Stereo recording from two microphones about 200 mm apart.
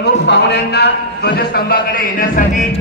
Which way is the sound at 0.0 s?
60° left (ahead or behind).